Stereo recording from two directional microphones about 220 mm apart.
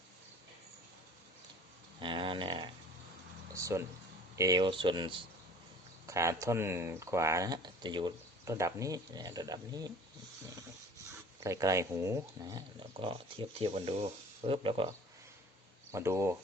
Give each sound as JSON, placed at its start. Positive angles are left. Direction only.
{"t": 2.0, "sound": "a sound", "side_deg": -20}
{"t": 4.4, "sound": "speech", "side_deg": -15}
{"t": 11.4, "sound": "speech", "side_deg": -15}
{"t": 15.9, "sound": "speech", "side_deg": -10}